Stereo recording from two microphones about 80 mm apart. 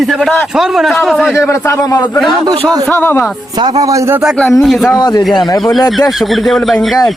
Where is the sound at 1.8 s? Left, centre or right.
Left.